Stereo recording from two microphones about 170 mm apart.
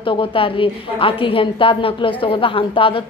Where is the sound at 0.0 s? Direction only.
30° left (ahead or behind).